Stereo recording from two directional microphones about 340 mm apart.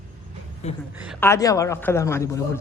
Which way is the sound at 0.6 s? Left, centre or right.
Centre.